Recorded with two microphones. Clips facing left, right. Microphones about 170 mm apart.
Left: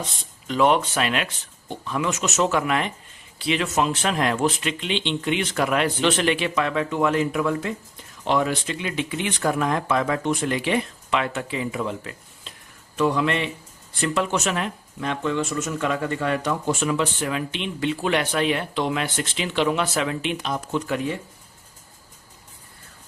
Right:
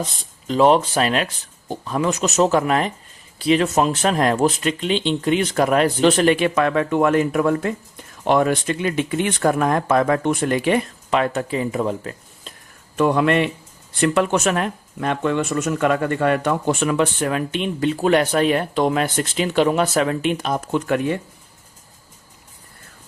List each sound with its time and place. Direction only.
0.4 s speech: 35° right (ahead or behind)
13.0 s speech: 55° right (ahead or behind)